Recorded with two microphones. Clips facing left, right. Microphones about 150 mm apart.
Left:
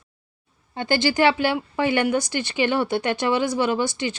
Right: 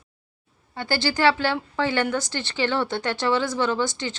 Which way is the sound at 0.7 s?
20° left (ahead or behind).